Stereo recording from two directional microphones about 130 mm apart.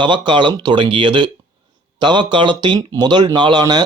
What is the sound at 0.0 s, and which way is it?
Speech, 40° right (ahead or behind).